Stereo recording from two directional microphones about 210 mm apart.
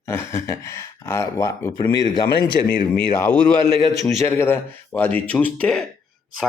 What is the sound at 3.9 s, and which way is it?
Speech, centre (ahead or behind).